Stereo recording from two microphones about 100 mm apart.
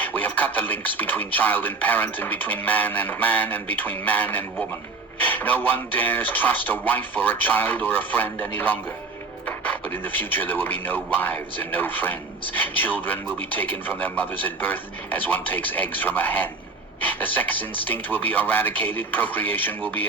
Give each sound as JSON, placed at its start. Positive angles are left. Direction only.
{"t": 0.0, "sound": "speech", "side_deg": 15}